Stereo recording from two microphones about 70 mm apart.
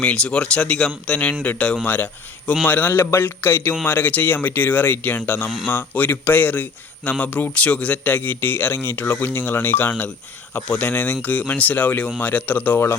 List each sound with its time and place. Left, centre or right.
0.0 s speech: centre